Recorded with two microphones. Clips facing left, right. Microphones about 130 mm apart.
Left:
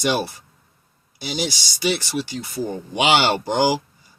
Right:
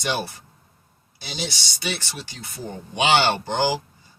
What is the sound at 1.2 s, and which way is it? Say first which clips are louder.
Speech: left 6 dB; 15° left (ahead or behind).